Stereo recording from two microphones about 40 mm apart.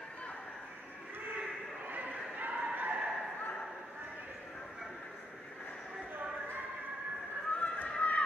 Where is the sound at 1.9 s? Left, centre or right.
Right.